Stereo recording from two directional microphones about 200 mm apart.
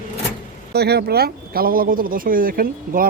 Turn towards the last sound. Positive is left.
turn(degrees=-45)  # may be behind; listen again after turning